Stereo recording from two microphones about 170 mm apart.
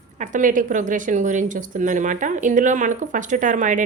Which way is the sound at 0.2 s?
50° right (ahead or behind).